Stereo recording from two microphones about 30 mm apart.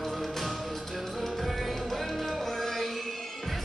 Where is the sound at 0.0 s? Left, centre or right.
Centre.